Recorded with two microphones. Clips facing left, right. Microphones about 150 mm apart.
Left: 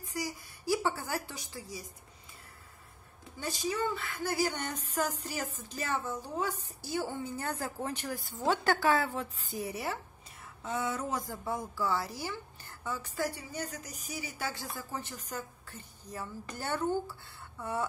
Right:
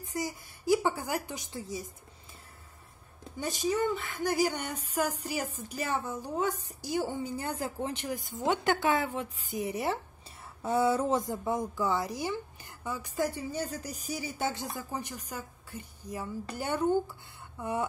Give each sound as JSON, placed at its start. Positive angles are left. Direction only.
{"t": 0.0, "sound": "a woman's voice", "side_deg": -25}
{"t": 3.3, "sound": "a woman's voice", "side_deg": -20}
{"t": 10.6, "sound": "a woman's voice", "side_deg": -30}